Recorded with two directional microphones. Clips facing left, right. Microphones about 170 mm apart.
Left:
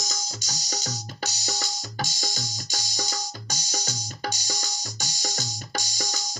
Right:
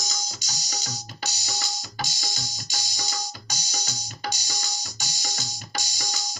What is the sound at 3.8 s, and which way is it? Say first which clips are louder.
Music: even; 40° left (ahead or behind).